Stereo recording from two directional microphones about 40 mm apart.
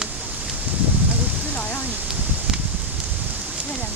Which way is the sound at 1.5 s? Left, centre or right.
Left.